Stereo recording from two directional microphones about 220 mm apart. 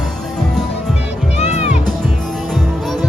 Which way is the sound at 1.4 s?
30° left (ahead or behind).